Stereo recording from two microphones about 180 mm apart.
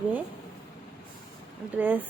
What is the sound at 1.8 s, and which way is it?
Speech, 10° right (ahead or behind).